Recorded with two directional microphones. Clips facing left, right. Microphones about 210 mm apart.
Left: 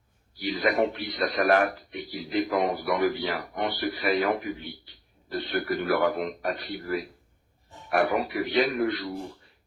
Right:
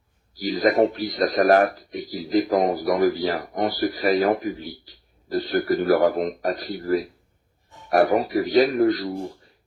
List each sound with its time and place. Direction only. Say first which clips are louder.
0.3 s speech: right 6 dB; 40° right (ahead or behind)